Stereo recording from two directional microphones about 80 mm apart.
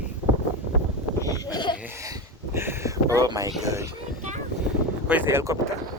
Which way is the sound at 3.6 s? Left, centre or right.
Right.